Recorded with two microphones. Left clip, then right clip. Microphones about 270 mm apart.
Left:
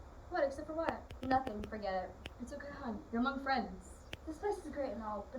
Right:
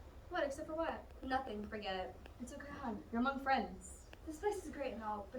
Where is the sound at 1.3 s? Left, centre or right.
Centre.